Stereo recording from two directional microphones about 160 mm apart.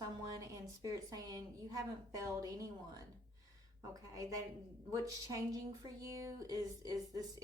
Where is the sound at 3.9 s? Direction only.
20° right (ahead or behind).